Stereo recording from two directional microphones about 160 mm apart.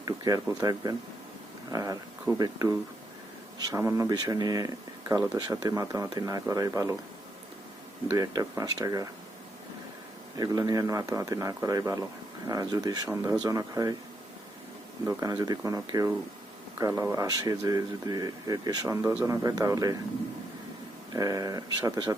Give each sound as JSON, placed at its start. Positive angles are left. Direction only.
{"t": 0.0, "sound": "speech", "side_deg": -20}
{"t": 8.1, "sound": "speech", "side_deg": -20}
{"t": 10.3, "sound": "speech", "side_deg": -25}
{"t": 15.0, "sound": "speech", "side_deg": -20}
{"t": 21.1, "sound": "speech", "side_deg": -20}